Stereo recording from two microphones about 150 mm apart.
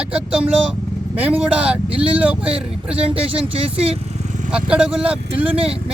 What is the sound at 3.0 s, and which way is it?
Speech, 40° right (ahead or behind).